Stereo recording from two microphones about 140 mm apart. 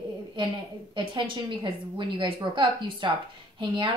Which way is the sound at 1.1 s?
35° right (ahead or behind).